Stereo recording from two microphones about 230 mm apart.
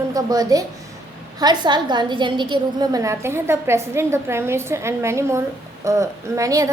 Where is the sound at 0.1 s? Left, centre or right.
Centre.